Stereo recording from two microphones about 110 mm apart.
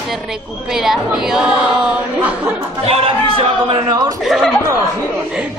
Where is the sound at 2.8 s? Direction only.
65° right (ahead or behind).